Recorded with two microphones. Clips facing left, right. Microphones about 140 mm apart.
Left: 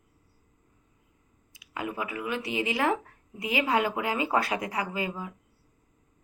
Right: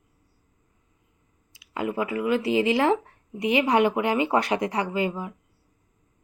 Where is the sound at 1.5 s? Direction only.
30° right (ahead or behind).